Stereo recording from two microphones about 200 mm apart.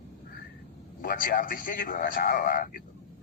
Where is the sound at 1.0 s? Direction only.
45° left (ahead or behind).